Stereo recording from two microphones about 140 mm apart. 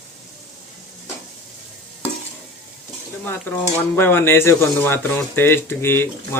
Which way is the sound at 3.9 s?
15° left (ahead or behind).